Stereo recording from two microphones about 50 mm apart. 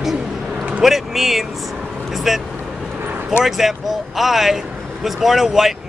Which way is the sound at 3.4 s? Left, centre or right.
Centre.